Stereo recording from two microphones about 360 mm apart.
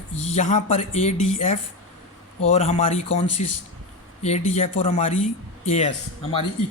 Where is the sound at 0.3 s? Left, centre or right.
Centre.